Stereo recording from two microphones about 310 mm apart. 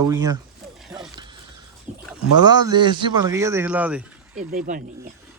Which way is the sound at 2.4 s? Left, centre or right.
Centre.